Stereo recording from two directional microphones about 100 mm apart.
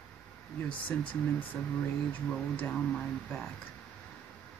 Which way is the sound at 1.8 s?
15° left (ahead or behind).